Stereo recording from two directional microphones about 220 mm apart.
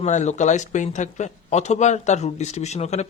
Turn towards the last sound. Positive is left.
turn(degrees=30)  # may be behind; listen again after turning